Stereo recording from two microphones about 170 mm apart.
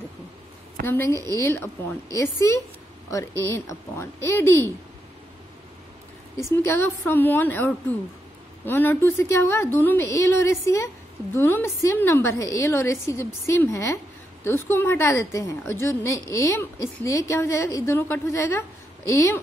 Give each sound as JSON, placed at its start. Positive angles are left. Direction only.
{"t": 0.8, "sound": "a woman's voice", "side_deg": 15}
{"t": 6.6, "sound": "a woman's voice", "side_deg": 15}